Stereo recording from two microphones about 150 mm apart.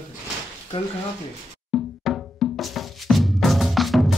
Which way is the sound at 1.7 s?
Centre (ahead or behind).